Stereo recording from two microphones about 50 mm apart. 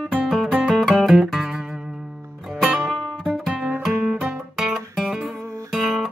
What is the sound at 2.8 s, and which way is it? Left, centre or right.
Music, centre.